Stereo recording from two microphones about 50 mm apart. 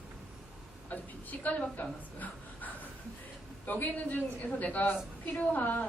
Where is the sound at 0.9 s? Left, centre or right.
Left.